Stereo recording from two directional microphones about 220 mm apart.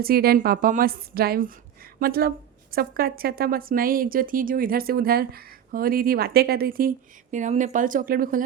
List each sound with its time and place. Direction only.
0.0 s a woman's voice: 45° right (ahead or behind)